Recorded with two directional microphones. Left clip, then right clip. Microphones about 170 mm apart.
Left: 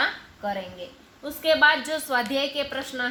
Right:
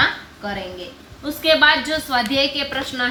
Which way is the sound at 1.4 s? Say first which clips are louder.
Right 5 dB; 55° left (ahead or behind).